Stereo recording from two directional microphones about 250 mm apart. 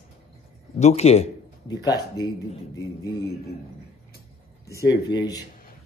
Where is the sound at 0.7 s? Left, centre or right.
Left.